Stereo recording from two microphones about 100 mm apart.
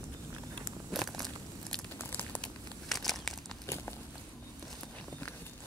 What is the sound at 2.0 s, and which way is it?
Crumpling, 20° left (ahead or behind).